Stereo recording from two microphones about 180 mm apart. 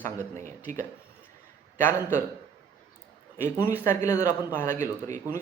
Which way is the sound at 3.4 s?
15° left (ahead or behind).